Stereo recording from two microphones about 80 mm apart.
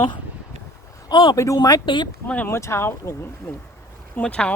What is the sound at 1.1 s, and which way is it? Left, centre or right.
Speech, left.